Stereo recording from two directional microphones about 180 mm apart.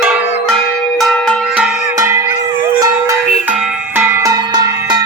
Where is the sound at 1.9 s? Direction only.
15° right (ahead or behind).